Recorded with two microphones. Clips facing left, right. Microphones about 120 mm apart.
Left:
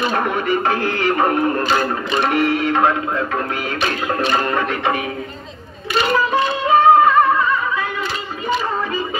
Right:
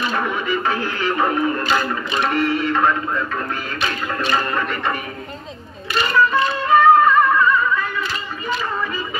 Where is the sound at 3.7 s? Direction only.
50° left (ahead or behind); by 5.0 s 65° left (ahead or behind).